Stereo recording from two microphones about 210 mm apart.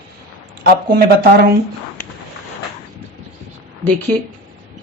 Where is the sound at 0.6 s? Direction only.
45° right (ahead or behind).